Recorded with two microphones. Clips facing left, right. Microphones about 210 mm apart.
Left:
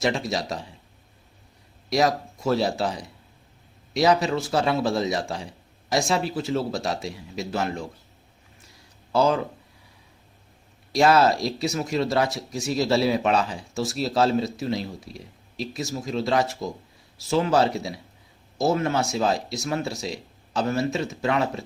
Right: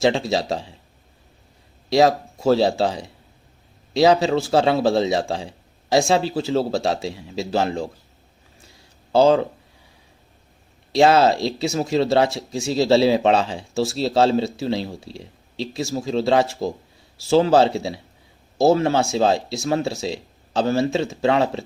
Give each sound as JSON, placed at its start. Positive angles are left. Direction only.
{"t": 0.0, "sound": "speech", "side_deg": -25}
{"t": 1.9, "sound": "speech", "side_deg": -30}
{"t": 9.1, "sound": "speech", "side_deg": -30}
{"t": 10.9, "sound": "speech", "side_deg": -25}